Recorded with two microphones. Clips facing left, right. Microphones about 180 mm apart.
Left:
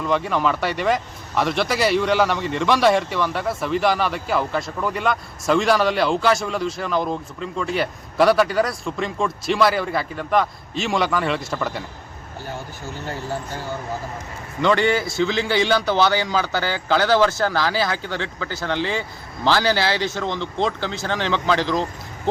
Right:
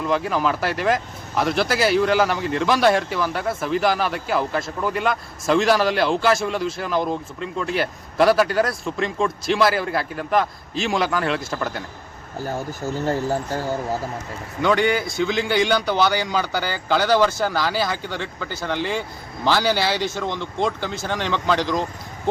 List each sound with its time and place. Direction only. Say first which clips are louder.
0.0 s speech: even; centre (ahead or behind)
12.4 s speech: right 6 dB; 40° right (ahead or behind)
14.6 s speech: left 1 dB; centre (ahead or behind)